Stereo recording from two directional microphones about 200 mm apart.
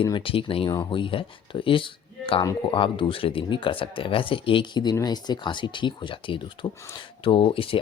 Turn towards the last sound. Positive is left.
turn(degrees=25)  # may be behind; listen again after turning